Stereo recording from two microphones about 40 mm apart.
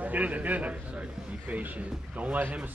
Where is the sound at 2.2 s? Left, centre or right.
Right.